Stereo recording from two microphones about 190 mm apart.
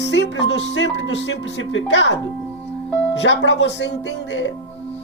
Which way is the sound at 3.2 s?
70° left (ahead or behind).